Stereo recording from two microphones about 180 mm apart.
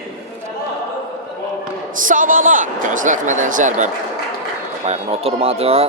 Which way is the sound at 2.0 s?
50° right (ahead or behind).